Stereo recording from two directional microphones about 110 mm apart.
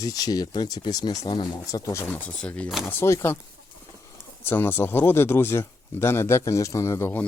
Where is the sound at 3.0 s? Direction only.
25° left (ahead or behind).